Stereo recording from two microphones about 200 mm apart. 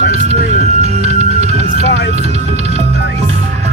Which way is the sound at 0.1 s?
30° right (ahead or behind).